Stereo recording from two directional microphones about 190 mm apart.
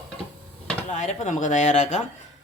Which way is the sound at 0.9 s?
40° left (ahead or behind).